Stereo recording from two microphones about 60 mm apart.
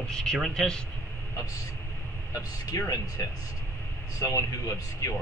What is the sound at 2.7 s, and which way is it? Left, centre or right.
Speech, left.